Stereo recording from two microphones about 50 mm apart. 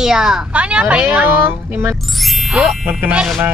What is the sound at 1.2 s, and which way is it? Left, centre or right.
Speech, right.